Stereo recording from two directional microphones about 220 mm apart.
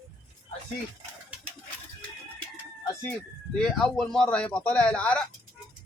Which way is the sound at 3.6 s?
Centre (ahead or behind).